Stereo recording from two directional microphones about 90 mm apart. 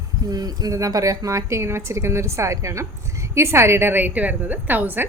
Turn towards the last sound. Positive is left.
turn(degrees=-20)  # may be behind; listen again after turning